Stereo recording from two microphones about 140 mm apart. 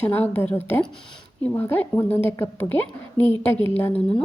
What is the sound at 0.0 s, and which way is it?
A woman's voice, 15° left (ahead or behind).